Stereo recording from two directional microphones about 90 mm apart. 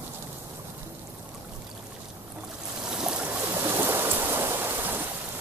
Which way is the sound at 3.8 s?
25° right (ahead or behind).